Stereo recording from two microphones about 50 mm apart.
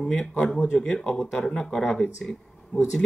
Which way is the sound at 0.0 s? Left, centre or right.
Centre.